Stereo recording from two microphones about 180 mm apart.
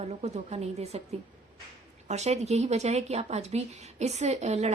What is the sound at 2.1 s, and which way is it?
A woman's voice, 40° right (ahead or behind).